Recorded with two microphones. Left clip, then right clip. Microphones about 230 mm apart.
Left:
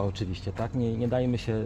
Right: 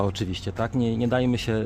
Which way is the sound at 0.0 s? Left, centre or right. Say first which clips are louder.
Right 5 dB; right.